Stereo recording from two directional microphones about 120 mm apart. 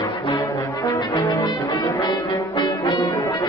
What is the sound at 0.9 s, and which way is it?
Brass instrument, 25° left (ahead or behind).